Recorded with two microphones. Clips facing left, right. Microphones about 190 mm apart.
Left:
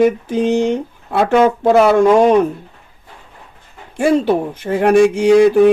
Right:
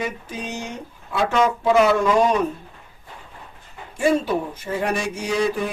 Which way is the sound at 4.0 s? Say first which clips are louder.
Left 6 dB; 60° left (ahead or behind).